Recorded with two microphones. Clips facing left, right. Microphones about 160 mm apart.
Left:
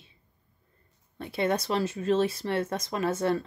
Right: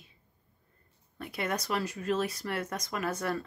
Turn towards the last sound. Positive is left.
turn(degrees=25)  # may be behind; listen again after turning